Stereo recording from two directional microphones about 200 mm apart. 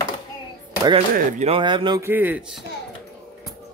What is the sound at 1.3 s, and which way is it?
Speech, 35° right (ahead or behind).